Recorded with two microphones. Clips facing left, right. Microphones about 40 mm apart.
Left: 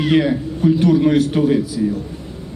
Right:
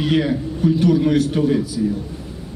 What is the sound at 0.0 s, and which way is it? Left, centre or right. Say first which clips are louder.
A man's voice: left 3 dB; centre.